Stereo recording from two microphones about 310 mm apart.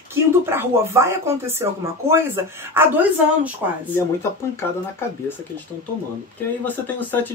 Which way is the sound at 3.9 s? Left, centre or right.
Centre.